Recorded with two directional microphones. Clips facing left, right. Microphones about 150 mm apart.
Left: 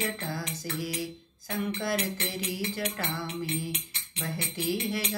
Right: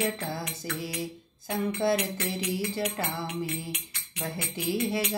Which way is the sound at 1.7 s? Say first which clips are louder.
Right 7 dB; 25° right (ahead or behind).